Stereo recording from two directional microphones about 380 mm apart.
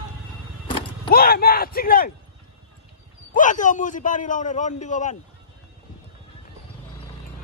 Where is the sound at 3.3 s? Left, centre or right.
Centre.